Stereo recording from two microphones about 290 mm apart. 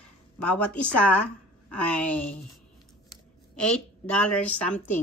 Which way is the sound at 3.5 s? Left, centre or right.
Centre.